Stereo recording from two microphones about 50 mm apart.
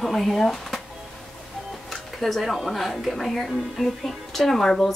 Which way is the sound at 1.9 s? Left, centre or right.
Centre.